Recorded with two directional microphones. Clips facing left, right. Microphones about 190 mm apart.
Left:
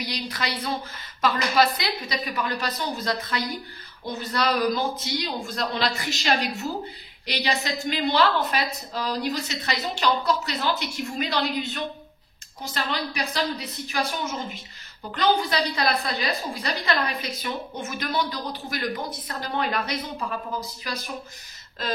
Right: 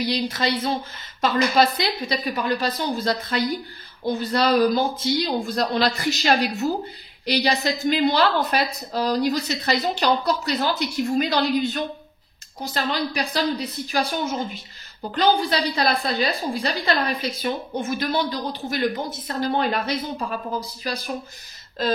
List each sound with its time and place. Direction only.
0.0 s a woman's voice: 25° right (ahead or behind)